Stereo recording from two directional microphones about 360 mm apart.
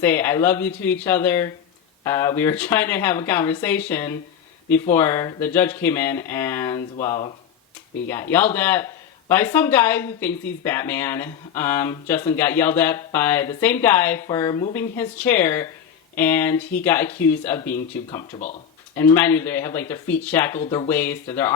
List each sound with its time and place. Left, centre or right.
0.0 s speech: centre